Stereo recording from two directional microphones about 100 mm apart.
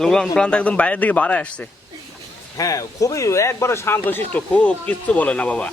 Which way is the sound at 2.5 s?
35° left (ahead or behind).